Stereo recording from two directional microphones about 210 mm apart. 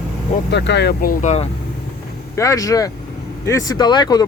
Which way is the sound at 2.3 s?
15° left (ahead or behind).